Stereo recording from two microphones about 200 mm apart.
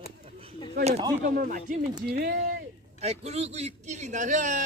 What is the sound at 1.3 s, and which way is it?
Speech, 45° right (ahead or behind).